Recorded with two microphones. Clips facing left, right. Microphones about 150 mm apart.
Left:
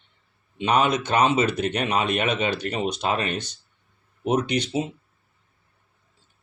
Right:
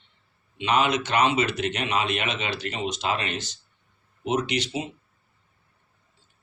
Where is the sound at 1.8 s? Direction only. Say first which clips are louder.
Left 4 dB; 45° left (ahead or behind).